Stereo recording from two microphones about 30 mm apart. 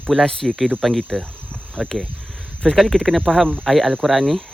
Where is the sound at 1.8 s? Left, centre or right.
Right.